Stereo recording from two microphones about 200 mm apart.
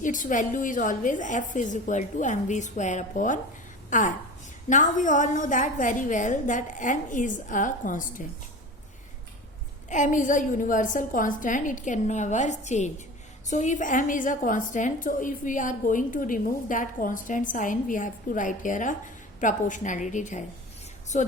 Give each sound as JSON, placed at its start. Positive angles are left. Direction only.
{"t": 0.0, "sound": "a woman's voice", "side_deg": 40}
{"t": 9.9, "sound": "a woman's voice", "side_deg": 40}